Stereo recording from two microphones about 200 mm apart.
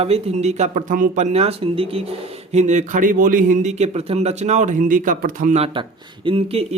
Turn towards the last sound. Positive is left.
turn(degrees=-30)  # may be behind; listen again after turning